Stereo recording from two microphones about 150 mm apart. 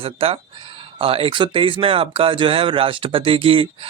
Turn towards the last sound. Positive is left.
turn(degrees=-35)  # may be behind; listen again after turning